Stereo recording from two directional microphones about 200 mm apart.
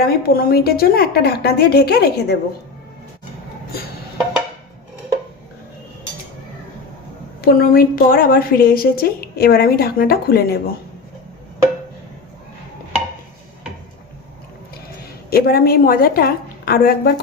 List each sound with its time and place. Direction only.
0.0 s a woman's voice: 50° left (ahead or behind)
7.4 s a woman's voice: 50° left (ahead or behind)
15.3 s a woman's voice: 50° left (ahead or behind)